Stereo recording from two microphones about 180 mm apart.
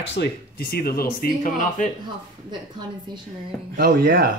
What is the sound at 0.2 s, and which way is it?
Speech, 55° left (ahead or behind).